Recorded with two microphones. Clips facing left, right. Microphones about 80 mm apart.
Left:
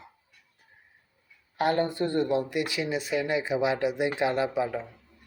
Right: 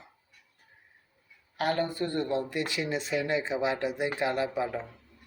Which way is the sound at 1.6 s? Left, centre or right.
Left.